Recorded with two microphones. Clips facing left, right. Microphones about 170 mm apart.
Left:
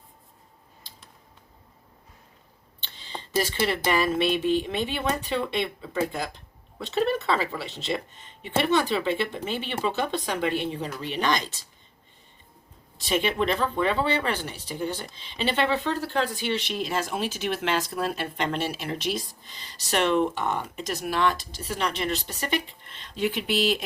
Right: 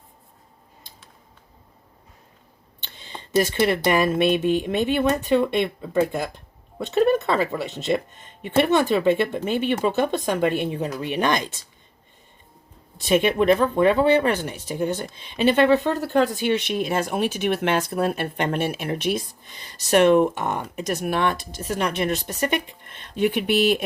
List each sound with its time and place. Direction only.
2.8 s speech: 50° right (ahead or behind)
13.0 s speech: 50° right (ahead or behind)